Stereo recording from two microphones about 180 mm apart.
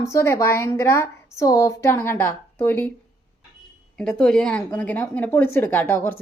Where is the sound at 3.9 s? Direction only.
5° left (ahead or behind).